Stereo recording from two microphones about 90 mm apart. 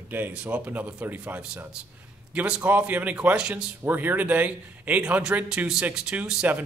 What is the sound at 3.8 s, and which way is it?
A man's voice, 20° right (ahead or behind).